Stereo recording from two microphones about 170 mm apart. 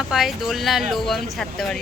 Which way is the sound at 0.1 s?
Centre (ahead or behind).